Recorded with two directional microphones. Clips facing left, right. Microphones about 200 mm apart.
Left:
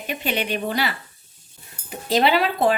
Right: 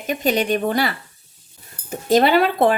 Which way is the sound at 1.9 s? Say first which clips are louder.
Right 4 dB; 45° right (ahead or behind).